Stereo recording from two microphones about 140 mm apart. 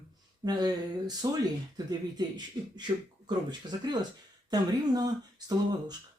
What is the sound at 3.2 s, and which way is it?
Speech, 30° right (ahead or behind).